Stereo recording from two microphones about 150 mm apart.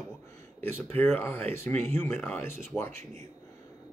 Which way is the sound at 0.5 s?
15° left (ahead or behind).